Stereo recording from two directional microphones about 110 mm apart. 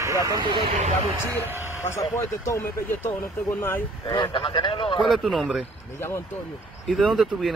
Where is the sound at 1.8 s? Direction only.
25° left (ahead or behind).